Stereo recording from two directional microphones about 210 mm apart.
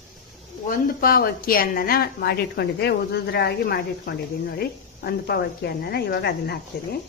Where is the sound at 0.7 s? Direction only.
45° left (ahead or behind).